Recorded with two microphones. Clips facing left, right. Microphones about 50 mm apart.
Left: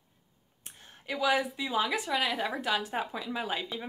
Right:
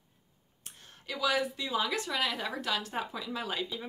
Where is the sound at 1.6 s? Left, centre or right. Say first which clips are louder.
Left 2 dB; centre.